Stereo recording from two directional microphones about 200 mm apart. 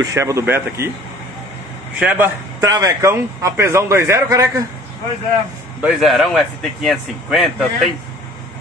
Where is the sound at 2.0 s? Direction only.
10° right (ahead or behind).